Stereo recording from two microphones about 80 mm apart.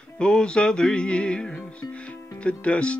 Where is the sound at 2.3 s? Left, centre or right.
Centre.